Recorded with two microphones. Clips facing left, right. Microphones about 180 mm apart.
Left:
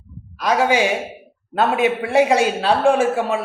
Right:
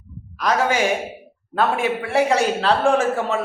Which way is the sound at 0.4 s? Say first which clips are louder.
Left 2 dB; 15° left (ahead or behind).